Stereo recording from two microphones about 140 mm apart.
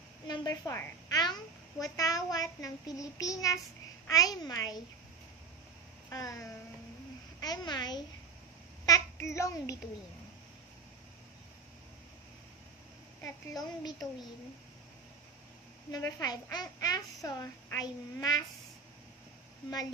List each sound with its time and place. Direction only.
0.3 s a child's voice: 20° left (ahead or behind)
6.0 s a child's voice: 25° left (ahead or behind)
13.6 s a child's voice: 25° left (ahead or behind)
15.9 s a child's voice: 25° left (ahead or behind)